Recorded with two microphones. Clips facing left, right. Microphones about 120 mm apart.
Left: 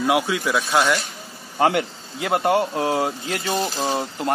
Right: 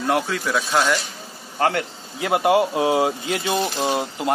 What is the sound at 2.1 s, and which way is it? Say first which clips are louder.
Speech: right 2 dB; centre (ahead or behind).